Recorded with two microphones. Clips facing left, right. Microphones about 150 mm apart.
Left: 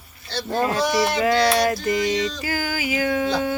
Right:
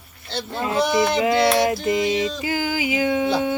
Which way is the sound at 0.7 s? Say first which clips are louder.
Right 4 dB; 20° right (ahead or behind).